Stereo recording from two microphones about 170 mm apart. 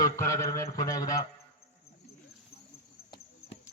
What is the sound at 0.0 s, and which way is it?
Speech, 20° left (ahead or behind).